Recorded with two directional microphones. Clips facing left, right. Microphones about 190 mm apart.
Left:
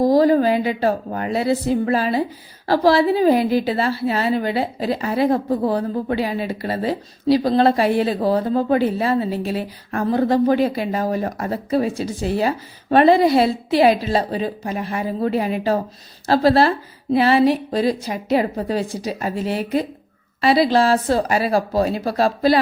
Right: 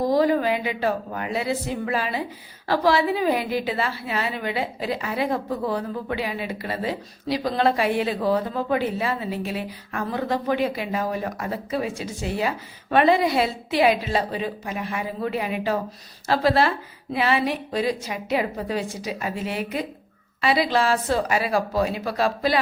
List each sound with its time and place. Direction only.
0.0 s a woman's voice: 35° left (ahead or behind)